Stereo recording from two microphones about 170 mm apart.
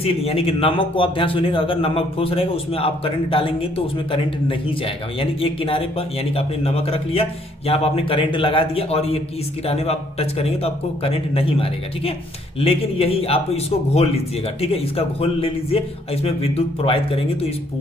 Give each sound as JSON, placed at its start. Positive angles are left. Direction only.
{"t": 0.0, "sound": "a man's voice", "side_deg": 35}